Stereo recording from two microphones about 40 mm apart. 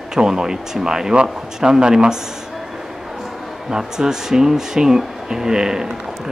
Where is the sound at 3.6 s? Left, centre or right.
Centre.